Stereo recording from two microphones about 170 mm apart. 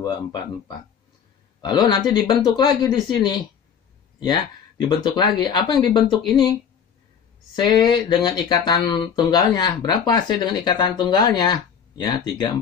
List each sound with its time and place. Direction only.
0.0 s speech: 25° left (ahead or behind)
7.5 s speech: 25° left (ahead or behind)